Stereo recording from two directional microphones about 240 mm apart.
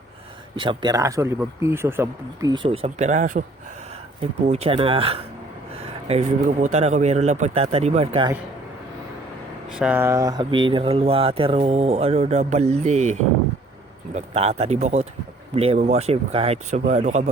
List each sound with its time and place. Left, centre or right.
0.6 s speech: centre
9.7 s speech: centre; by 13.1 s right
14.2 s speech: right